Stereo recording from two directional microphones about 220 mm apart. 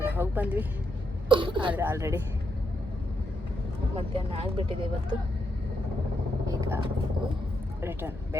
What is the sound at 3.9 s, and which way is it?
Speech, 25° right (ahead or behind).